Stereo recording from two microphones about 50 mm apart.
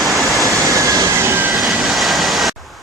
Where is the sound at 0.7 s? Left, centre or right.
Right.